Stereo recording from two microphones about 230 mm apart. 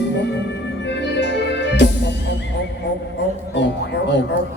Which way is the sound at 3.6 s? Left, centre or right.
Left.